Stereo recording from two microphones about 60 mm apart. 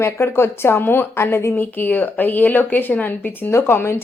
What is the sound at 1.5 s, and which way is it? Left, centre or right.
Speech, left.